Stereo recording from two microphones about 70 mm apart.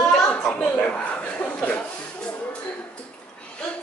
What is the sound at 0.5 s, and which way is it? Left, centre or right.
Chuckle, left.